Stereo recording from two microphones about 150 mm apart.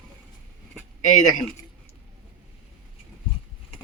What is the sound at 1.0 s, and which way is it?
Speech, 55° left (ahead or behind).